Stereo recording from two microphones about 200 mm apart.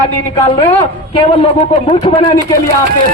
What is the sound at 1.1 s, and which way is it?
A man's voice, 25° left (ahead or behind).